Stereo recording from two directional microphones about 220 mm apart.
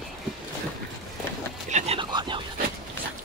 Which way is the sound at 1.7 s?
30° right (ahead or behind).